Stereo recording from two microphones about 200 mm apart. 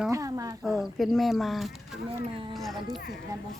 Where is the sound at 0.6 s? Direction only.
Centre (ahead or behind).